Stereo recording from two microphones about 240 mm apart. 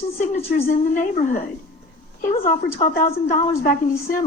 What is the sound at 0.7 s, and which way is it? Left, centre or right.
Speech, left.